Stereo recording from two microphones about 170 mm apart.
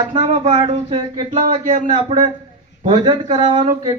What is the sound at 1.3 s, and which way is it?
Speech, 45° right (ahead or behind).